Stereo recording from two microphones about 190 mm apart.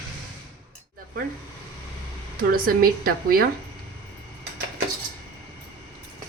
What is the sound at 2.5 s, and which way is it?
Speech, 50° right (ahead or behind).